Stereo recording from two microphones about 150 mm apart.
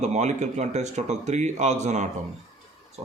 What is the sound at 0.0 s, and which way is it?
Speech, 50° right (ahead or behind).